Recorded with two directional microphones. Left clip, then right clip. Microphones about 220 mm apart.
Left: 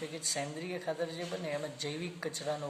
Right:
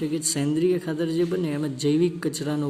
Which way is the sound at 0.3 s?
50° right (ahead or behind).